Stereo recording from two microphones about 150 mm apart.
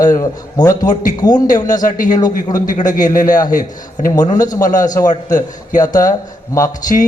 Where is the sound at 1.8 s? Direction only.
60° left (ahead or behind).